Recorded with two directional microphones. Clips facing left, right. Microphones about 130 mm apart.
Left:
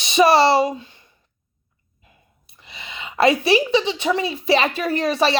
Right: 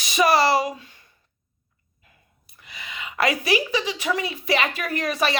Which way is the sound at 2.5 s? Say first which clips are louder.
Left 1 dB; 25° left (ahead or behind).